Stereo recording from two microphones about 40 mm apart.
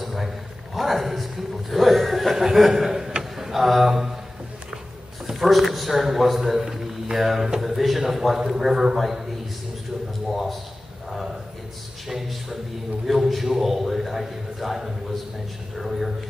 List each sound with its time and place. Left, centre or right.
0.0 s a sound: centre
0.7 s speech: centre
3.2 s a sound: centre
5.2 s a man's voice: centre
10.3 s a man's voice: centre
13.0 s a man's voice: centre